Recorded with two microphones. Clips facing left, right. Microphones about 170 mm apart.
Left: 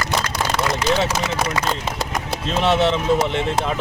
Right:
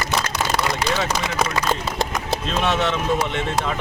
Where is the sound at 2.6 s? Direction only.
30° left (ahead or behind).